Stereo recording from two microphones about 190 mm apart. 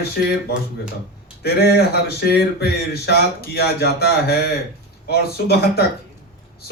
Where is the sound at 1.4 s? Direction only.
55° left (ahead or behind).